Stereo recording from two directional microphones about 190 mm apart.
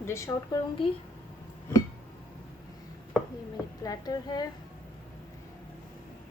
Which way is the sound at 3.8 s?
20° left (ahead or behind).